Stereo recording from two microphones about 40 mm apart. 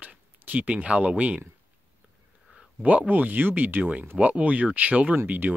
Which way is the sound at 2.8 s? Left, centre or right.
Right.